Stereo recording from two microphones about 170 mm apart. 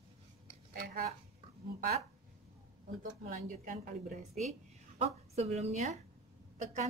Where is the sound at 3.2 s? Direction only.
50° right (ahead or behind).